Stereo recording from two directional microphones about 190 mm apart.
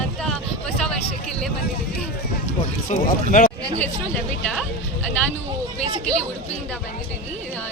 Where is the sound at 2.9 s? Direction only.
40° left (ahead or behind).